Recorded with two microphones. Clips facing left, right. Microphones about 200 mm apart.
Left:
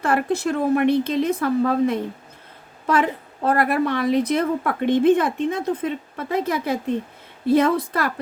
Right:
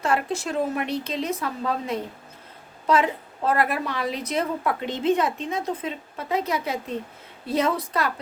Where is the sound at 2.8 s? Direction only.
55° left (ahead or behind).